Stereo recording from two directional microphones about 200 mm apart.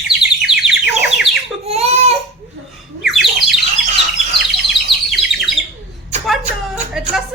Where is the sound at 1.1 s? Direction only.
Centre (ahead or behind).